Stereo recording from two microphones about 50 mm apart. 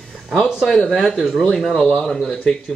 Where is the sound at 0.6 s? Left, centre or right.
Centre.